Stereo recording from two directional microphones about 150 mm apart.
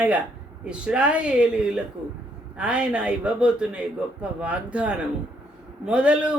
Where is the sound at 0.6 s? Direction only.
5° right (ahead or behind).